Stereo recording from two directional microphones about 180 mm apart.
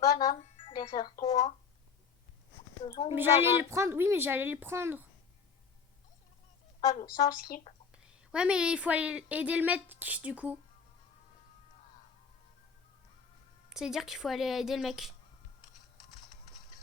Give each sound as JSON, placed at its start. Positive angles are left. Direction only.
{"t": 0.0, "sound": "music", "side_deg": 20}
{"t": 1.2, "sound": "speech", "side_deg": 20}
{"t": 2.8, "sound": "speech", "side_deg": 25}
{"t": 3.2, "sound": "speech", "side_deg": -15}
{"t": 6.8, "sound": "speech", "side_deg": 20}
{"t": 8.3, "sound": "speech", "side_deg": -5}
{"t": 13.7, "sound": "speech", "side_deg": 0}